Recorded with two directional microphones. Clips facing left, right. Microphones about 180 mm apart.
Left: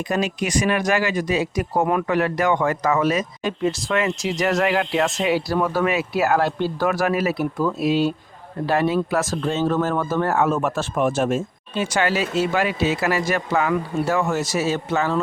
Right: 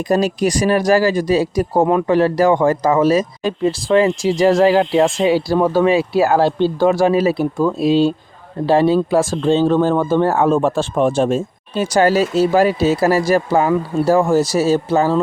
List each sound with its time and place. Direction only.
0.0 s speech: 35° right (ahead or behind)